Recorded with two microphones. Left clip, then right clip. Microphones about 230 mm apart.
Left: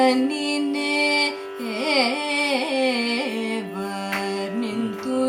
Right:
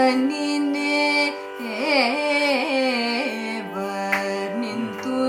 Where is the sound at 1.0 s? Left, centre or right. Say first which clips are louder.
Even; left.